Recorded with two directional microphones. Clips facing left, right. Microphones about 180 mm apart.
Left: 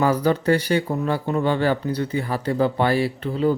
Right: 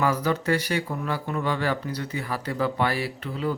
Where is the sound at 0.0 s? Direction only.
30° left (ahead or behind).